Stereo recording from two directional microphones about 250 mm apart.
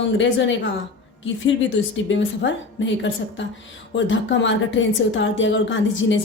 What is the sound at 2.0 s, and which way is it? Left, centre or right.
A woman's voice, left.